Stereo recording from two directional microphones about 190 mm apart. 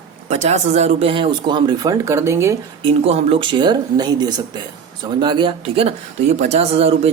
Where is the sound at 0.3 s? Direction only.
35° right (ahead or behind); by 2.6 s 15° right (ahead or behind).